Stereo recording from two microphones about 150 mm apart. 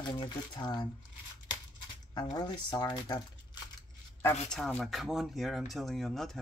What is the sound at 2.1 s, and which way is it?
Speech, 30° left (ahead or behind).